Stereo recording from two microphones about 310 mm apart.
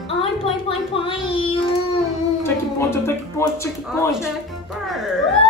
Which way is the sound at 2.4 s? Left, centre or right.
Centre.